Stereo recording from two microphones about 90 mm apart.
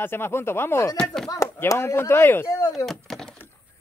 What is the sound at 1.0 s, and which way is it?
Speech, 5° left (ahead or behind).